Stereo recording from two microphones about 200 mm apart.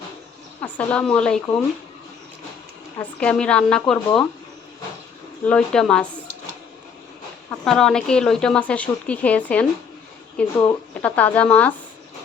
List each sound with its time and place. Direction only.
0.6 s speech: 5° left (ahead or behind)
3.0 s speech: 5° left (ahead or behind)
5.5 s speech: 5° left (ahead or behind)
7.6 s speech: centre (ahead or behind)